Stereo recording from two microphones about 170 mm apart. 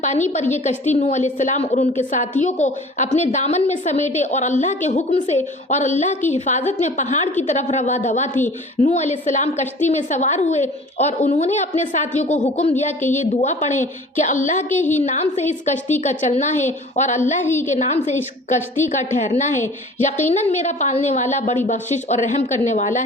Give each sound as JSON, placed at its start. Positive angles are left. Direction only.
{"t": 0.0, "sound": "a woman's voice", "side_deg": 45}
{"t": 17.4, "sound": "a woman's voice", "side_deg": 15}
{"t": 17.7, "sound": "a woman's voice", "side_deg": 45}